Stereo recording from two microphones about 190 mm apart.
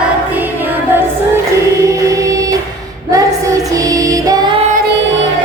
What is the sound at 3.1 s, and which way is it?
Child singing, 20° right (ahead or behind).